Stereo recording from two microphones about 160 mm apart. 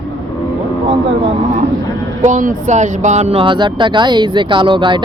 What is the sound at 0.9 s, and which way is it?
Speech, 35° right (ahead or behind).